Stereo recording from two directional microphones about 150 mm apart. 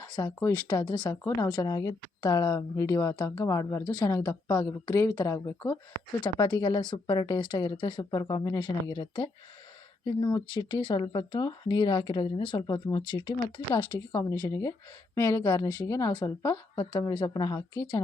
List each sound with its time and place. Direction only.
0.1 s speech: 25° left (ahead or behind)
0.9 s speech: 30° left (ahead or behind)